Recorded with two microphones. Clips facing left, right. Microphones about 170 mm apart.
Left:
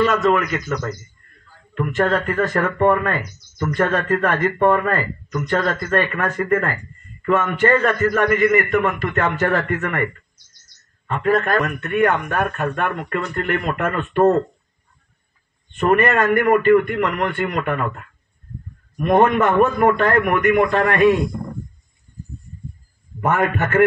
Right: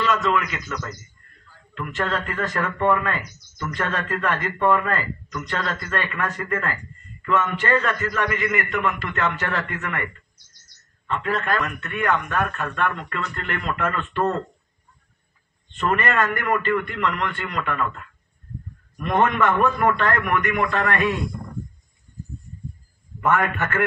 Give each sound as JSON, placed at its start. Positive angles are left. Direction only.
{"t": 0.0, "sound": "a man's voice", "side_deg": 45}
{"t": 1.8, "sound": "a man's voice", "side_deg": 50}
{"t": 3.3, "sound": "speech", "side_deg": 30}
{"t": 3.7, "sound": "a man's voice", "side_deg": 45}
{"t": 11.1, "sound": "a man's voice", "side_deg": 50}
{"t": 15.7, "sound": "a man's voice", "side_deg": 50}
{"t": 23.2, "sound": "a man's voice", "side_deg": 40}